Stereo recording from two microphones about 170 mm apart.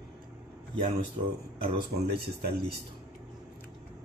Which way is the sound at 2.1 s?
70° right (ahead or behind).